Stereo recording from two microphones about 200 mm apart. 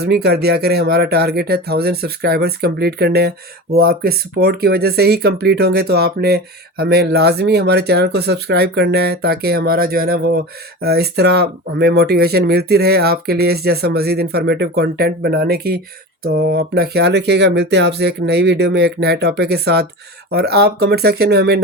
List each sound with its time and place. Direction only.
0.0 s speech: 55° right (ahead or behind)